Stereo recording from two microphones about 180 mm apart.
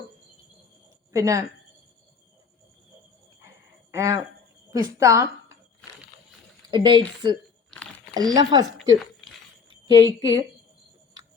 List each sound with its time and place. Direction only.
1.1 s a woman's voice: 20° right (ahead or behind)
3.9 s speech: 15° right (ahead or behind)
6.7 s speech: 25° right (ahead or behind)
9.6 s a woman's voice: 20° right (ahead or behind)